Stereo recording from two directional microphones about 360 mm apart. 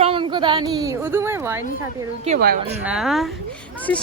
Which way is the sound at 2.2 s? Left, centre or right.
Right.